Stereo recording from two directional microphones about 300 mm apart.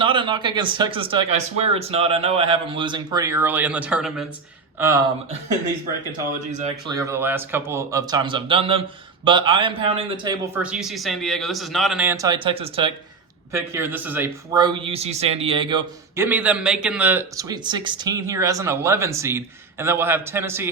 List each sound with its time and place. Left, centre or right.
0.0 s a man's voice: centre
6.5 s speech: right
6.9 s a man's voice: centre
13.5 s a man's voice: centre